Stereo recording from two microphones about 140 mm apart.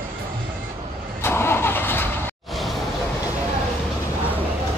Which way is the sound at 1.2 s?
15° left (ahead or behind).